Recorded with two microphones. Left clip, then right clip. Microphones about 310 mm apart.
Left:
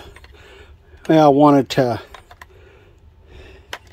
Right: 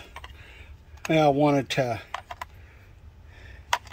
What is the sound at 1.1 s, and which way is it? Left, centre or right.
Speech, centre.